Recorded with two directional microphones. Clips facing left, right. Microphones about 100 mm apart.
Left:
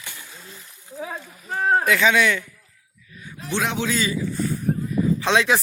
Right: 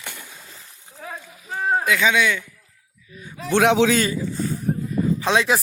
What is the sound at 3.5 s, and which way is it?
Speech, 75° right (ahead or behind).